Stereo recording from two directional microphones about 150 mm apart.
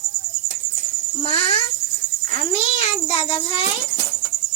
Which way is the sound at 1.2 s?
40° left (ahead or behind).